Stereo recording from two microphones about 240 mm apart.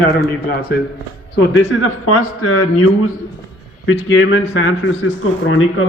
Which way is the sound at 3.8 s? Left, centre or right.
Left.